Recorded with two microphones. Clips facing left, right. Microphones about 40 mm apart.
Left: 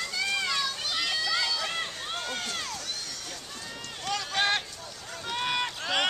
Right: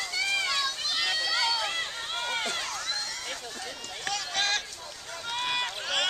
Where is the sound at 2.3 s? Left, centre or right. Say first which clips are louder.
Right 3 dB; right.